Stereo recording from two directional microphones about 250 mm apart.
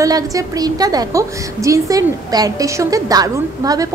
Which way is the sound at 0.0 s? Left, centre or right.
Centre.